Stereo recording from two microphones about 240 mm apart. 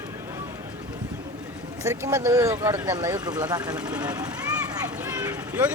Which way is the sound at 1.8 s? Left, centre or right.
Centre.